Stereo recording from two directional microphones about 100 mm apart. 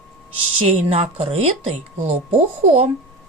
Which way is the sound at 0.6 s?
90° right.